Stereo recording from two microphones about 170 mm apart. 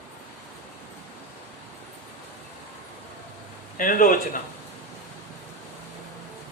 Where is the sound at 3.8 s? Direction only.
55° left (ahead or behind).